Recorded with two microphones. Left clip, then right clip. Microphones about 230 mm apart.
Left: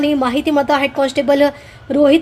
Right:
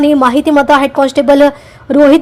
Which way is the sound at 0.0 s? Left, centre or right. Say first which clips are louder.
Right 7 dB; centre.